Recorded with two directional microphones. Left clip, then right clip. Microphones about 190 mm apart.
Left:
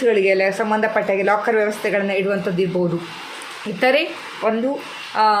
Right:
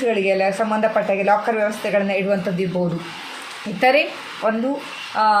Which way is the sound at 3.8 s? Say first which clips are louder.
Right 1 dB; 30° left (ahead or behind).